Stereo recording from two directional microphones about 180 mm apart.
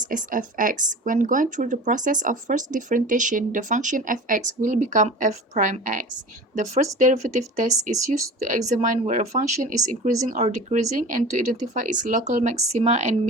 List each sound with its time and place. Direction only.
0.1 s speech: 45° right (ahead or behind)
8.7 s speech: 45° right (ahead or behind)